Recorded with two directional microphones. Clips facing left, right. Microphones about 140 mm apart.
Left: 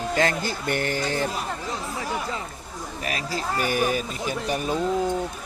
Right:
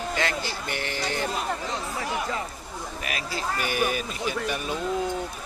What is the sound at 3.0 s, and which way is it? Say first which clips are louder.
Speech: left 3 dB; 35° left (ahead or behind).